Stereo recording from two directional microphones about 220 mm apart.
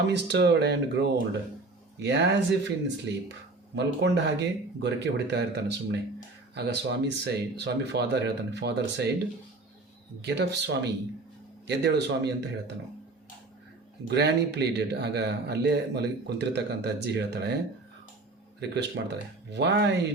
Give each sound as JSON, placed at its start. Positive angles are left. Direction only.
{"t": 0.1, "sound": "a man's voice", "side_deg": -50}
{"t": 3.8, "sound": "a man's voice", "side_deg": -50}
{"t": 10.2, "sound": "a man's voice", "side_deg": -50}
{"t": 14.1, "sound": "a man's voice", "side_deg": -50}
{"t": 18.6, "sound": "a man's voice", "side_deg": -50}